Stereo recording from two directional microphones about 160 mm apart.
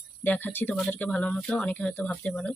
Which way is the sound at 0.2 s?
10° left (ahead or behind).